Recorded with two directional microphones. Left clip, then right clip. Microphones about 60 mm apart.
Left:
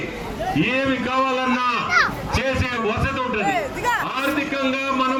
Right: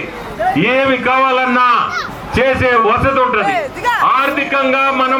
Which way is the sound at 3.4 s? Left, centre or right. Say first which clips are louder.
Right 6 dB; centre.